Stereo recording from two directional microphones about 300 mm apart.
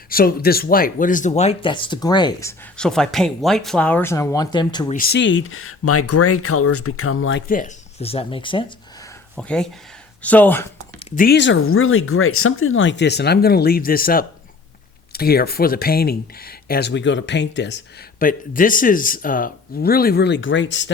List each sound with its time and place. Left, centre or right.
0.1 s speech: left; by 4.9 s centre
4.9 s speech: left; by 8.6 s centre
9.3 s speech: centre
11.0 s speech: left